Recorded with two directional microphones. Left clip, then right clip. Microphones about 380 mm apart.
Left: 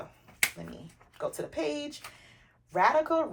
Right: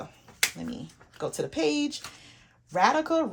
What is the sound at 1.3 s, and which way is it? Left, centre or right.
Speech, centre.